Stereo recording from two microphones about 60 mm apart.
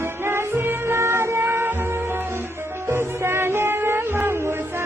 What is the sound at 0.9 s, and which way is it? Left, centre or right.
Music, right.